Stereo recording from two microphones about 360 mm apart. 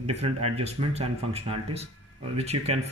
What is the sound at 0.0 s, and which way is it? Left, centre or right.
Speech, centre.